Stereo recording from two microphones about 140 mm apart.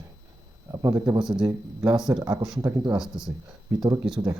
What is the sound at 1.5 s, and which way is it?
Speech, 25° right (ahead or behind).